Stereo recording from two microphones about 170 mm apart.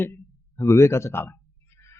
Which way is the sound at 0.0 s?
15° left (ahead or behind).